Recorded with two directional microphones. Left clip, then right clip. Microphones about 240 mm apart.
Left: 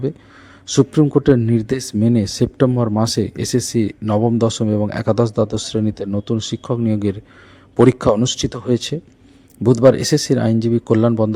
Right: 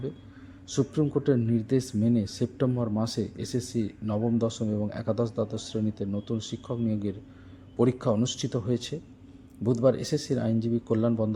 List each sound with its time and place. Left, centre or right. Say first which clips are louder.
0.7 s speech: left 13 dB; left